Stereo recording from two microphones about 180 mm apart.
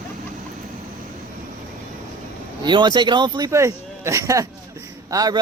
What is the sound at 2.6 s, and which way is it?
Speech, 25° right (ahead or behind).